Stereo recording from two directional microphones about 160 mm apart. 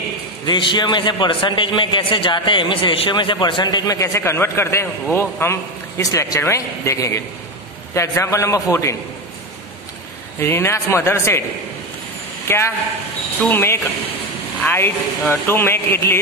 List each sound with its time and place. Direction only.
0.5 s a man's voice: 30° left (ahead or behind)
10.4 s speech: 15° left (ahead or behind)
12.4 s speech: 15° left (ahead or behind)